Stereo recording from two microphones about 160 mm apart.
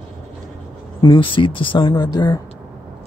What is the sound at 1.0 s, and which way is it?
Speech, 30° left (ahead or behind).